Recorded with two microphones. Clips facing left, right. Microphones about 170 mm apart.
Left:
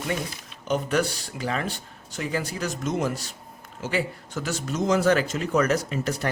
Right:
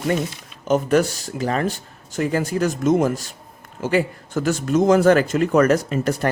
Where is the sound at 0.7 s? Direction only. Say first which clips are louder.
Right 7 dB; 45° right (ahead or behind).